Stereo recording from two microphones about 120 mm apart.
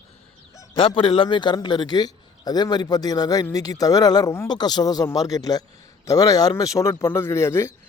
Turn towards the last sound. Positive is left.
turn(degrees=20)  # may be behind; listen again after turning